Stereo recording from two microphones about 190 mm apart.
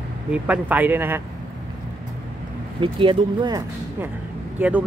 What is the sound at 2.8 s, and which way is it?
Speech, 25° right (ahead or behind).